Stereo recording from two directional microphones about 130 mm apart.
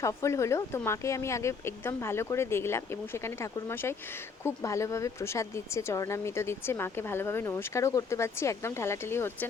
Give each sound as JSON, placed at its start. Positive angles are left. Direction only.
{"t": 0.0, "sound": "speech", "side_deg": 25}